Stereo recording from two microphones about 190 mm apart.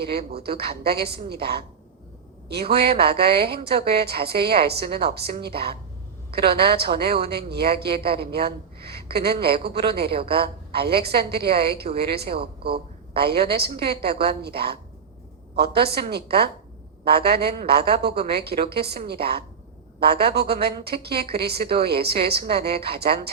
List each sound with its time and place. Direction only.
0.0 s a woman's voice: 55° right (ahead or behind)